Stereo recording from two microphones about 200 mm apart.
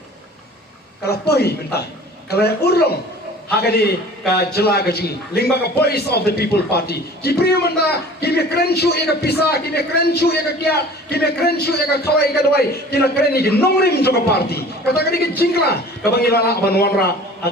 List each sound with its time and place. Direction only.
1.1 s a man's voice: 55° left (ahead or behind)